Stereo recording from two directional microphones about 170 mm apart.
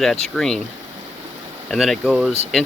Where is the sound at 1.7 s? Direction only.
Centre (ahead or behind).